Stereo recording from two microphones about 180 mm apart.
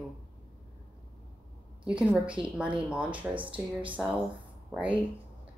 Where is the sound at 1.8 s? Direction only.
5° right (ahead or behind).